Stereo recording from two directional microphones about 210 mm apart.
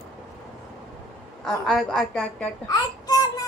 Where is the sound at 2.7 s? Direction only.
15° left (ahead or behind).